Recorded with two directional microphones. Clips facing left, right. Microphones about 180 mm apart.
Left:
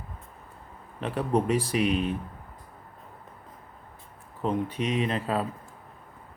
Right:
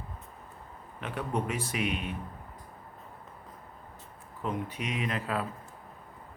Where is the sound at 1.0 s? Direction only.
35° left (ahead or behind).